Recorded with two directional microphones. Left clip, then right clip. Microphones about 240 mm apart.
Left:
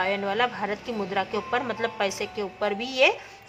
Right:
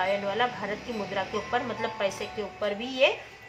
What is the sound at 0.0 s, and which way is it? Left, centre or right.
A woman's voice, left.